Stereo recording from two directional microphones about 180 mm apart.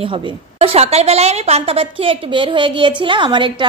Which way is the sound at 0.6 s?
35° right (ahead or behind).